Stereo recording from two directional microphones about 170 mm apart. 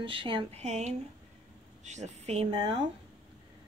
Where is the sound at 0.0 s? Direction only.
30° right (ahead or behind).